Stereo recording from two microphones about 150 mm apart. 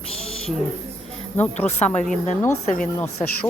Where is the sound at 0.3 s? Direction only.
40° left (ahead or behind).